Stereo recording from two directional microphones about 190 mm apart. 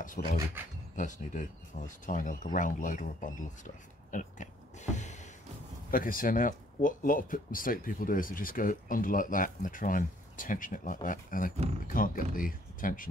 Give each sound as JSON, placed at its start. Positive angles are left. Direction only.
{"t": 0.2, "sound": "speech", "side_deg": 55}
{"t": 0.6, "sound": "speech", "side_deg": -10}
{"t": 0.9, "sound": "speech", "side_deg": 40}
{"t": 5.9, "sound": "speech", "side_deg": 45}